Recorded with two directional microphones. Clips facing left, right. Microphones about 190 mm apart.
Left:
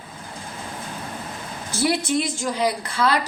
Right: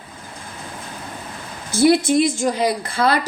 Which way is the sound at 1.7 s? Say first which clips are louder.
Right 7 dB; 45° right (ahead or behind).